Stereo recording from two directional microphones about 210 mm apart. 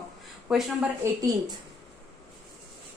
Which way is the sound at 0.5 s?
Centre (ahead or behind).